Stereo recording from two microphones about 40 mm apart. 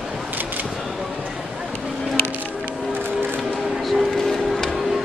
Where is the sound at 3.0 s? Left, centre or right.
Right.